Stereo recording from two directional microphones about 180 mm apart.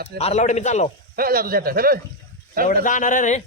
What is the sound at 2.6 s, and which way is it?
Speech, 45° left (ahead or behind).